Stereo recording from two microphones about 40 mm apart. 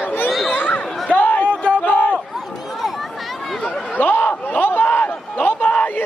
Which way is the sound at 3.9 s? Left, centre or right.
Left.